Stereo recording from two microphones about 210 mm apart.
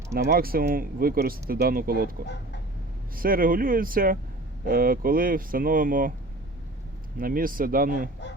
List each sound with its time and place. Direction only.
0.1 s speech: 50° right (ahead or behind)
3.2 s speech: 45° right (ahead or behind)
7.2 s speech: 45° right (ahead or behind)